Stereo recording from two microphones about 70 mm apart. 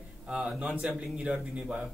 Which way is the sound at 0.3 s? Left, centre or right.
Centre.